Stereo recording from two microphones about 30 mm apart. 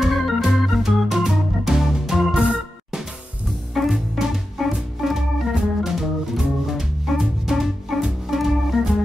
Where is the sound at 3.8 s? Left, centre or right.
Centre.